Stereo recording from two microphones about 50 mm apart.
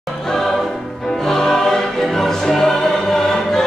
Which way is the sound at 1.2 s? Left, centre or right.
Centre.